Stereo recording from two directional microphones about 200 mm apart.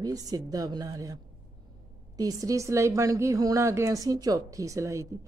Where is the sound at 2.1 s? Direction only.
15° right (ahead or behind).